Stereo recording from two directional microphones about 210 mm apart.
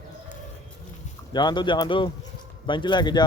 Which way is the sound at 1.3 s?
20° left (ahead or behind).